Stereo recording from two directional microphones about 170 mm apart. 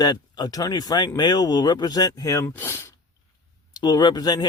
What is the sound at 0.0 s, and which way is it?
Speech, 25° left (ahead or behind).